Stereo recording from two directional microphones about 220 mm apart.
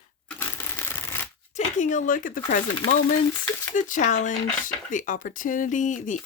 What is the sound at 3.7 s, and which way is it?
Speech, 35° left (ahead or behind).